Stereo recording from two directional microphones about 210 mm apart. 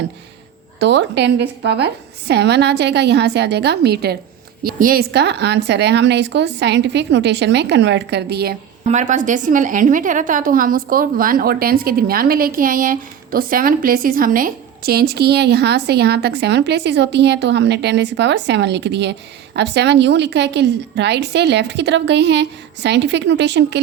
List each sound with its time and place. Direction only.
0.8 s a woman's voice: 55° right (ahead or behind)
8.9 s a woman's voice: 35° right (ahead or behind); by 23.8 s 55° right (ahead or behind)